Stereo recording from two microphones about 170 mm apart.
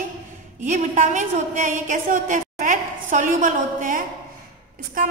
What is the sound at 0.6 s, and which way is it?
A woman's voice, 45° right (ahead or behind).